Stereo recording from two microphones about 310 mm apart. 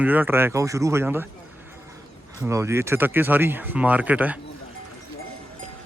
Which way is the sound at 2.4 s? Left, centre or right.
Centre.